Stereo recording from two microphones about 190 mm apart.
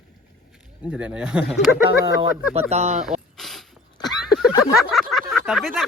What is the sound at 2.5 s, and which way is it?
Speech, 35° right (ahead or behind).